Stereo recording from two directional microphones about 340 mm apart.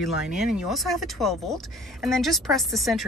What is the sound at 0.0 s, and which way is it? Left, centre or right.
Speech, centre.